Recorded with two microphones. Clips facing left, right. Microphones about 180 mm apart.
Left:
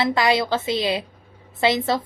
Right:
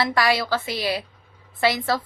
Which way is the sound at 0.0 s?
20° left (ahead or behind).